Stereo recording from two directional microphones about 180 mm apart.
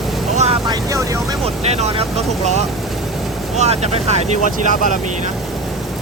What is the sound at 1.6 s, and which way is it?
Speech, 35° right (ahead or behind).